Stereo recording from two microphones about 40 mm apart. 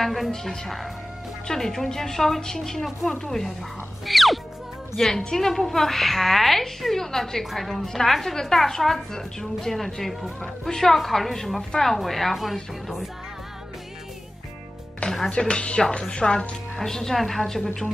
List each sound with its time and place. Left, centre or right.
0.0 s a woman's voice: centre
0.3 s a woman's voice: centre
4.0 s music: centre
4.9 s a woman's voice: centre
15.0 s music: left
15.3 s a woman's voice: left; by 17.6 s centre